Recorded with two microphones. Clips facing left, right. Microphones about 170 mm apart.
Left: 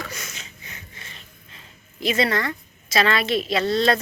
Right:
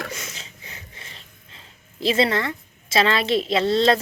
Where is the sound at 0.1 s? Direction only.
30° right (ahead or behind).